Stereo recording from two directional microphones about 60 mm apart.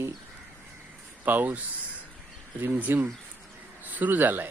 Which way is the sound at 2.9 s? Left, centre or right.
Right.